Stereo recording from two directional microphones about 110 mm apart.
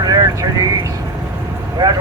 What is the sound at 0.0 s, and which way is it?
Vehicle, 40° right (ahead or behind).